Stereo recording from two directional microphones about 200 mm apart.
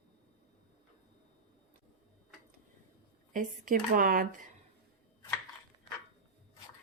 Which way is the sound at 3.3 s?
40° right (ahead or behind).